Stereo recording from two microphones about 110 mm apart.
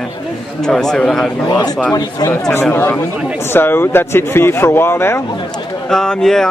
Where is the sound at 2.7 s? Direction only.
20° left (ahead or behind).